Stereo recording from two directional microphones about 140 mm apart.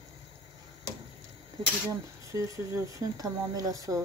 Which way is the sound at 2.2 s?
20° right (ahead or behind).